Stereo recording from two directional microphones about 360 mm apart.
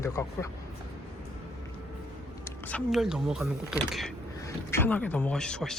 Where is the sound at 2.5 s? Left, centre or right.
Centre.